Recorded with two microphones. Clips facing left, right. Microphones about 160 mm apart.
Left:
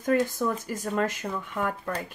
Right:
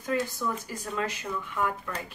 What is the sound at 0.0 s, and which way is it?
Speech, 50° left (ahead or behind).